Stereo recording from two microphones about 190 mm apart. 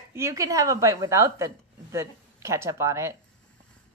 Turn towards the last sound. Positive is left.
turn(degrees=-15)  # may be behind; listen again after turning